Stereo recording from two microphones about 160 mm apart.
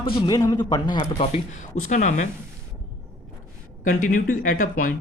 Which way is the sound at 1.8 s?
50° left (ahead or behind).